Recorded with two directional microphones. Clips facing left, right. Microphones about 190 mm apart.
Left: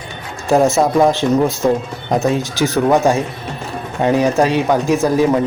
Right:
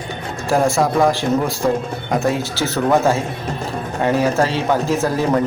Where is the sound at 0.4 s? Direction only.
20° left (ahead or behind).